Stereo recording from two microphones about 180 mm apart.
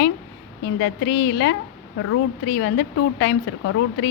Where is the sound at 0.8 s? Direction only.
85° left.